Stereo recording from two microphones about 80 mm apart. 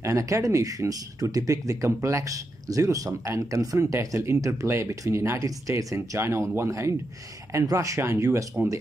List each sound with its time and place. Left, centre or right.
0.0 s speech: right
6.1 s speech: right